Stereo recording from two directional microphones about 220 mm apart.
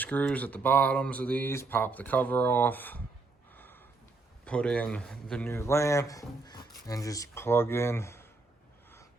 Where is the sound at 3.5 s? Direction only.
10° left (ahead or behind).